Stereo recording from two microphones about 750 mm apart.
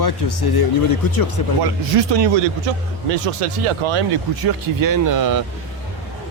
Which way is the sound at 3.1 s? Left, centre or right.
Right.